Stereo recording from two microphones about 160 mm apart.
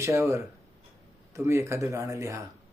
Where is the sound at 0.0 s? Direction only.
20° right (ahead or behind).